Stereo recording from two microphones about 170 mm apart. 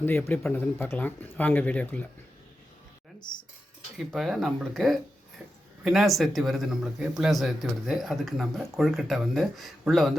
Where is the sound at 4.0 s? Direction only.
Centre (ahead or behind).